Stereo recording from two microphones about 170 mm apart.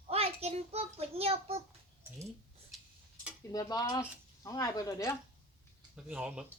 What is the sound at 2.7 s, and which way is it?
Tick-tock, centre (ahead or behind).